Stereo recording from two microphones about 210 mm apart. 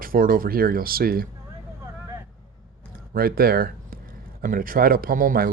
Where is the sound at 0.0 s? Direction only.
40° right (ahead or behind).